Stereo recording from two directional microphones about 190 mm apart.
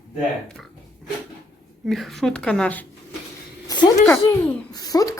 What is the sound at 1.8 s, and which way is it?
Speech, centre (ahead or behind).